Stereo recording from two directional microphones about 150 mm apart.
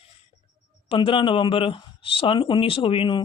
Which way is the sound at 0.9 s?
35° left (ahead or behind).